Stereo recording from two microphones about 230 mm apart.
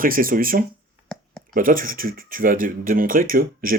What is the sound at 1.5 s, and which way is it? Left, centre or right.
Speech, right.